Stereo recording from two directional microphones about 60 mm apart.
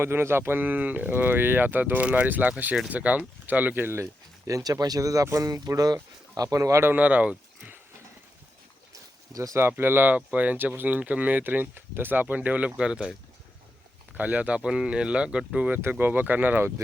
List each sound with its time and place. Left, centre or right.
0.0 s speech: right
3.8 s speech: right
6.9 s speech: right
8.9 s a sound: right
9.6 s speech: right
10.2 s speech: right
14.2 s speech: right
15.8 s speech: right